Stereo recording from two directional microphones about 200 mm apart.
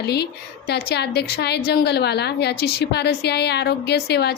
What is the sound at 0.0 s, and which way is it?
A woman's voice, 55° left (ahead or behind).